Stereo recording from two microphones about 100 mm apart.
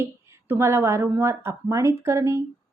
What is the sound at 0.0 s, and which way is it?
A woman's voice, 25° right (ahead or behind).